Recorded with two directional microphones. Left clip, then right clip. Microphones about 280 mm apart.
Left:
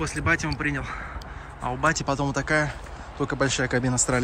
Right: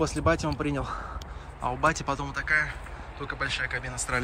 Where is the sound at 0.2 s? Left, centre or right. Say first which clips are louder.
Left 2 dB; centre.